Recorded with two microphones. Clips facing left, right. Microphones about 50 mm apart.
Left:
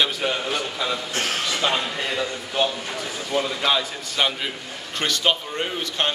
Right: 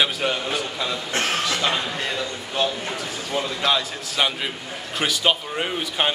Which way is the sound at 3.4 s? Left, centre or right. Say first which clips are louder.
Right 1 dB; centre.